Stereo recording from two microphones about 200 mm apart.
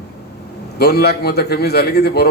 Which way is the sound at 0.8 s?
55° left (ahead or behind).